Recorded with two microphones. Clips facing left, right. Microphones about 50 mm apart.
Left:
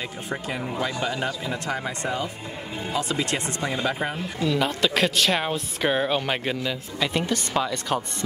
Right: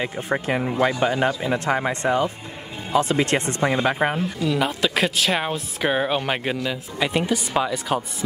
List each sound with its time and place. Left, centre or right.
0.0 s speech: right
4.5 s speech: centre